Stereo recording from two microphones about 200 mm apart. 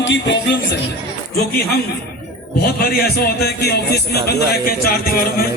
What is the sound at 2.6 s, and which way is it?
A man's voice, 50° left (ahead or behind).